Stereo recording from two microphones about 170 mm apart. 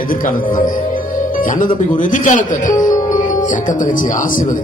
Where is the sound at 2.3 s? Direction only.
50° left (ahead or behind).